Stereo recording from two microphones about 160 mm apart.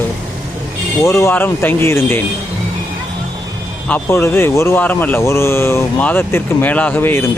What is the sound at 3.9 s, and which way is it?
Speech, 15° left (ahead or behind).